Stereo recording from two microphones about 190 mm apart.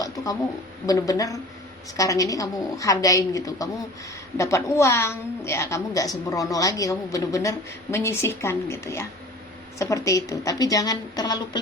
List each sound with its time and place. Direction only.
0.9 s a woman's voice: 20° left (ahead or behind)